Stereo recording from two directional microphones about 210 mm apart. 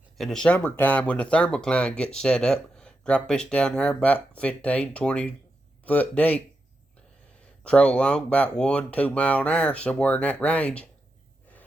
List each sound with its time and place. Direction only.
0.2 s speech: centre (ahead or behind)
7.6 s speech: 5° left (ahead or behind)